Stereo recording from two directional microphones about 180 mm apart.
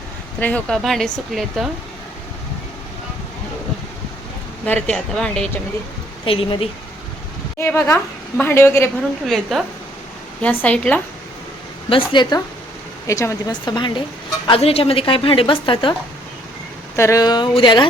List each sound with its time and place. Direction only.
0.3 s speech: 10° left (ahead or behind)
4.6 s speech: 5° left (ahead or behind)
6.2 s speech: 30° left (ahead or behind)
7.6 s speech: 15° left (ahead or behind)
9.2 s speech: centre (ahead or behind)
11.9 s speech: 25° left (ahead or behind)
17.0 s speech: 20° left (ahead or behind)